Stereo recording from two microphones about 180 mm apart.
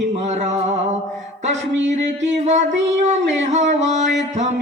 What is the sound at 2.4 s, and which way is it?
Speech, 40° right (ahead or behind).